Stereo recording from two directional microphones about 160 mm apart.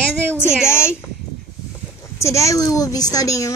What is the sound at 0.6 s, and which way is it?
Speech, 15° left (ahead or behind).